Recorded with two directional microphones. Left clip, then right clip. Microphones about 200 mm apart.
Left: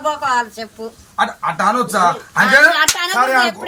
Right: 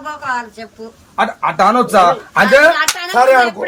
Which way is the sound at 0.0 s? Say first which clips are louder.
Left 4 dB; 15° left (ahead or behind).